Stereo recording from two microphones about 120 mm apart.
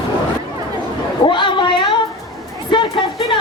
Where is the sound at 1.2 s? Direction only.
40° left (ahead or behind).